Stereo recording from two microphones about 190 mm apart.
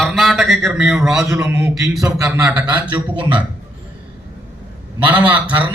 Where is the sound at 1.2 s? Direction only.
15° right (ahead or behind).